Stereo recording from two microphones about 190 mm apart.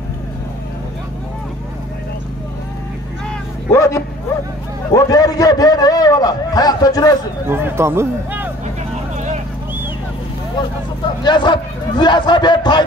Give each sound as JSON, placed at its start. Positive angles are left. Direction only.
{"t": 3.7, "sound": "bow-wow", "side_deg": 15}
{"t": 4.9, "sound": "a man's voice", "side_deg": 20}
{"t": 7.4, "sound": "speech", "side_deg": -10}
{"t": 9.1, "sound": "vehicle", "side_deg": -40}
{"t": 11.2, "sound": "a man's voice", "side_deg": 25}